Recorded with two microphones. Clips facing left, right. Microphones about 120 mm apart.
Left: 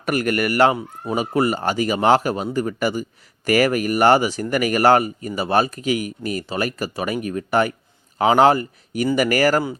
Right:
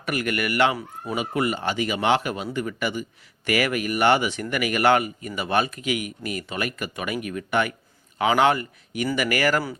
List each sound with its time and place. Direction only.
0.0 s speech: 40° left (ahead or behind)